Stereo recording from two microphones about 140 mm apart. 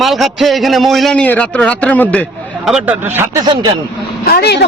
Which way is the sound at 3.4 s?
30° right (ahead or behind).